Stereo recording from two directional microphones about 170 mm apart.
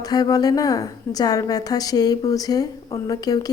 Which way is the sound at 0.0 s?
20° left (ahead or behind).